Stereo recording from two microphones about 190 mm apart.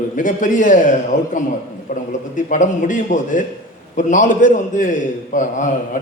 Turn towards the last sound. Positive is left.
turn(degrees=40)  # may be behind; listen again after turning